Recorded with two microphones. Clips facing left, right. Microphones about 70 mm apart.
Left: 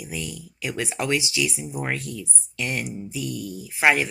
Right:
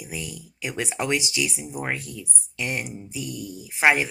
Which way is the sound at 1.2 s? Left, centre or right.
Right.